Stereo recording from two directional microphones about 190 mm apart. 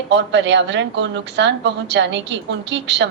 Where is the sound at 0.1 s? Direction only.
70° right (ahead or behind).